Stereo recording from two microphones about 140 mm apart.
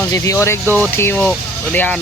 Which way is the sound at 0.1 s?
20° left (ahead or behind).